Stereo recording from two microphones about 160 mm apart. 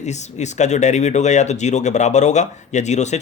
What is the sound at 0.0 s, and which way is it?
Speech, 45° left (ahead or behind).